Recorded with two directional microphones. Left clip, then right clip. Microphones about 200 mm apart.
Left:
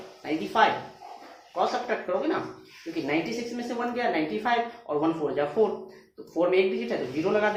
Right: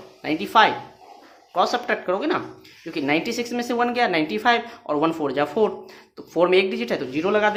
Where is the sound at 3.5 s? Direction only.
50° right (ahead or behind).